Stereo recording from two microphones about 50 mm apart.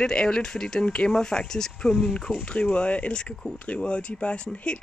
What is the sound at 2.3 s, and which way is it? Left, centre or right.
Speech, left.